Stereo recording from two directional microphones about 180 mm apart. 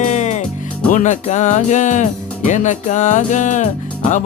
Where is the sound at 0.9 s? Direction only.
40° left (ahead or behind).